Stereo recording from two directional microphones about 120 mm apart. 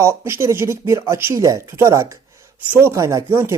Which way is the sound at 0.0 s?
20° right (ahead or behind).